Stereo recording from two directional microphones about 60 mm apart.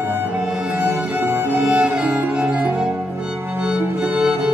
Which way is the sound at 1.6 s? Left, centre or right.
Centre.